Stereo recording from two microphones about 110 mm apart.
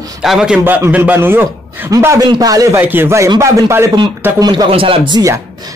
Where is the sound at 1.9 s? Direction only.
30° right (ahead or behind).